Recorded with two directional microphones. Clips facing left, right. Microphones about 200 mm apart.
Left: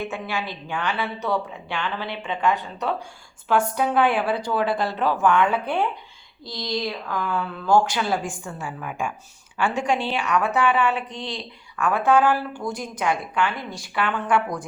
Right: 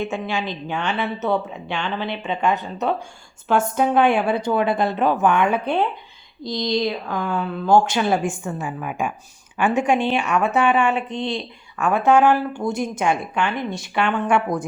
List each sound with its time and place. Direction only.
0.0 s a woman's voice: 25° right (ahead or behind)